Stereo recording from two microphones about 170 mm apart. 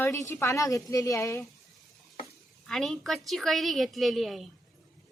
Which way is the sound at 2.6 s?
Centre (ahead or behind).